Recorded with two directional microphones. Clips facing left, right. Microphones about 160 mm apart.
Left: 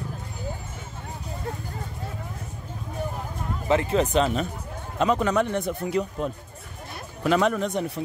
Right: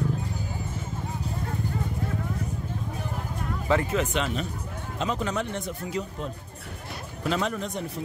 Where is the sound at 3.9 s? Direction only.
35° left (ahead or behind).